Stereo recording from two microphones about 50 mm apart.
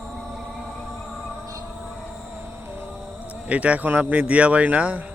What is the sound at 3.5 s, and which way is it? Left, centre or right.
Speech, right.